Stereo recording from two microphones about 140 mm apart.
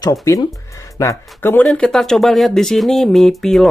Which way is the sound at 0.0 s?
25° left (ahead or behind).